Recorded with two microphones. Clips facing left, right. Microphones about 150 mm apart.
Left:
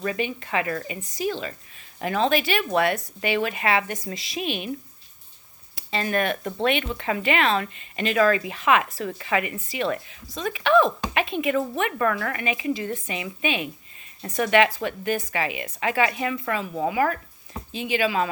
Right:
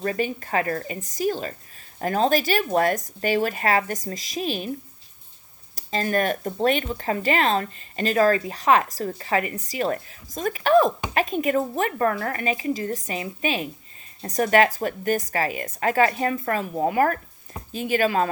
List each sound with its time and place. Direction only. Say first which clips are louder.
0.0 s a woman's voice: right 2 dB; 40° right (ahead or behind)
5.7 s a woman's voice: right 2 dB; 40° right (ahead or behind)